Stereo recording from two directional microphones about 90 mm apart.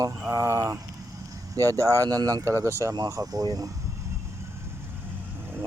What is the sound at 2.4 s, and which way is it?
Speech, 35° right (ahead or behind).